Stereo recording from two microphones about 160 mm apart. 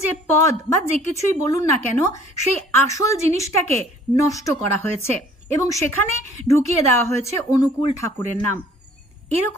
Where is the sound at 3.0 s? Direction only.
20° left (ahead or behind).